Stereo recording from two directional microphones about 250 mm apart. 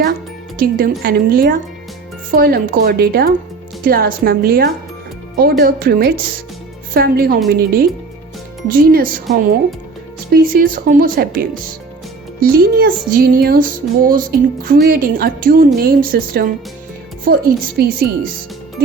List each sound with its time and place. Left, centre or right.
0.6 s music: right
10.3 s music: right